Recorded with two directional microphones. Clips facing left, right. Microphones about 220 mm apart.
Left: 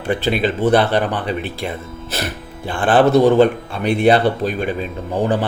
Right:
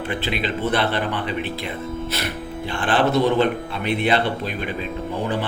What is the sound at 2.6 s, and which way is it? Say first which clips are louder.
A man's voice: left 6 dB; 50° left (ahead or behind).